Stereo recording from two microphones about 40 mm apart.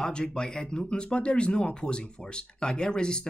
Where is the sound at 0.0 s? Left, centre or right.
Centre.